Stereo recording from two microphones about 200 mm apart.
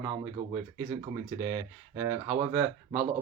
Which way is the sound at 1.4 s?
15° right (ahead or behind).